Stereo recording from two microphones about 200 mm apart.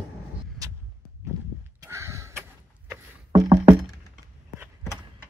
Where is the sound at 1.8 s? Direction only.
15° right (ahead or behind).